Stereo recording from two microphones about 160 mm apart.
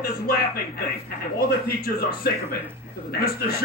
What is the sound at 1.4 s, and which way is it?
Speech, 70° left (ahead or behind).